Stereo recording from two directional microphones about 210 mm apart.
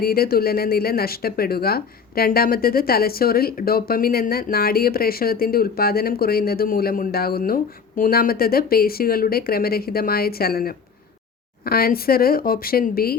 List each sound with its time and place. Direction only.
0.0 s speech: 45° left (ahead or behind)